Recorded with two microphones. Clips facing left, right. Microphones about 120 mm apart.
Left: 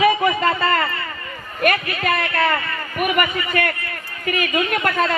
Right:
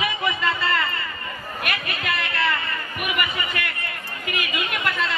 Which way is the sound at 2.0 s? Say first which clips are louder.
Left 5 dB; 45° left (ahead or behind).